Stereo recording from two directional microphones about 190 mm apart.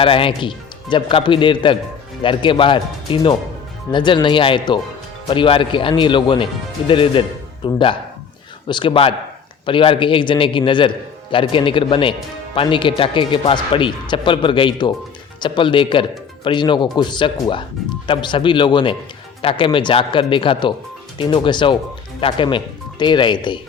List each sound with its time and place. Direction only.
0.0 s speech: 30° left (ahead or behind)